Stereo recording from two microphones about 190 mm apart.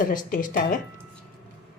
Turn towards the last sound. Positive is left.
turn(degrees=45)  # may be behind; listen again after turning